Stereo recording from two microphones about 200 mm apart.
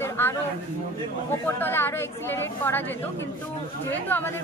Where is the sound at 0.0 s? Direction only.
10° left (ahead or behind).